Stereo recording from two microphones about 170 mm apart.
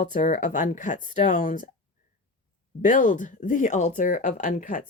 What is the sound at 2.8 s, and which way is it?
Speech, 50° left (ahead or behind).